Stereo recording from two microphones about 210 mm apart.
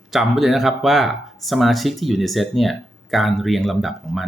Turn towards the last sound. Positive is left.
turn(degrees=0)  # may be behind; listen again after turning